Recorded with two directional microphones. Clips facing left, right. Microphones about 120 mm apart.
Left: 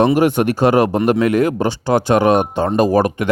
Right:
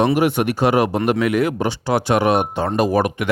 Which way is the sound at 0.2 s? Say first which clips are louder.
Left 3 dB; 40° left (ahead or behind).